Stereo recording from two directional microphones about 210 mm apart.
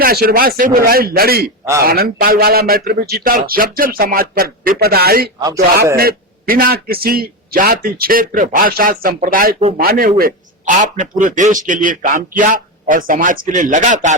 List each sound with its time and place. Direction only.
0.0 s a man's voice: 45° right (ahead or behind)